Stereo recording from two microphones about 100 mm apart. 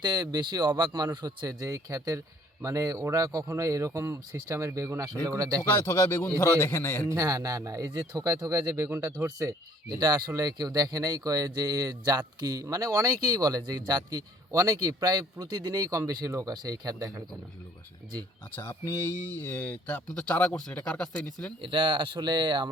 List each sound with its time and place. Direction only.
0.0 s speech: 40° right (ahead or behind)
5.7 s a man's voice: 30° left (ahead or behind)
7.1 s speech: 35° right (ahead or behind)
18.5 s a man's voice: 20° left (ahead or behind)
21.6 s speech: 55° right (ahead or behind)